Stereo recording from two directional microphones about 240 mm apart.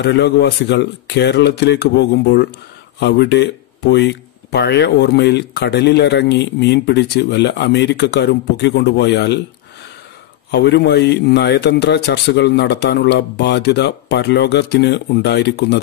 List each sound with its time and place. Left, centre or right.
0.0 s speech: left
10.5 s speech: left